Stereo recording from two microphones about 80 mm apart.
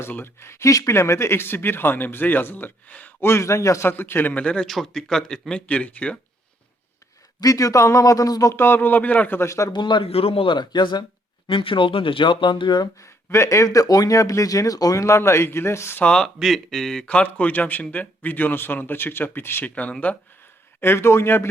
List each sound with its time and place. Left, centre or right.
0.0 s speech: left
3.2 s speech: left
4.4 s speech: centre
7.4 s speech: left
8.5 s speech: left
9.5 s speech: left
9.7 s speech: left
11.4 s speech: left
13.0 s speech: left
16.0 s speech: centre
20.8 s speech: left